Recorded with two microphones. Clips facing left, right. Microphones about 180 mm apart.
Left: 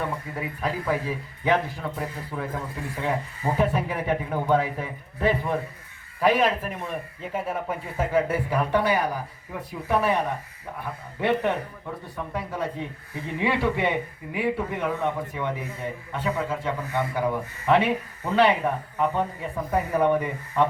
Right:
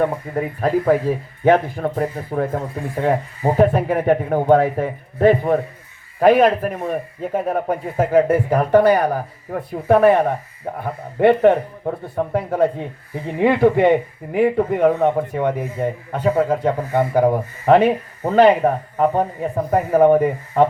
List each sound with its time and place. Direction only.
0.0 s speech: 50° right (ahead or behind)